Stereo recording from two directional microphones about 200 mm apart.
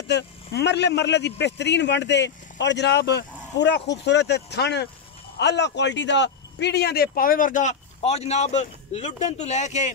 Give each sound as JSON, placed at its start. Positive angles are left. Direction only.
{"t": 0.1, "sound": "speech", "side_deg": 60}